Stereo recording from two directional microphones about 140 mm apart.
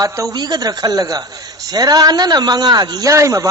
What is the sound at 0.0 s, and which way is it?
A man's voice, 25° right (ahead or behind).